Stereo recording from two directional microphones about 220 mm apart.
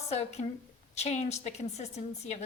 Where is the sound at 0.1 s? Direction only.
30° left (ahead or behind).